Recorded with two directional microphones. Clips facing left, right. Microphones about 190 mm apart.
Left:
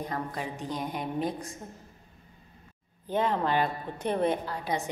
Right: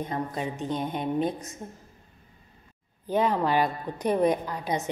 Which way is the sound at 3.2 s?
15° right (ahead or behind).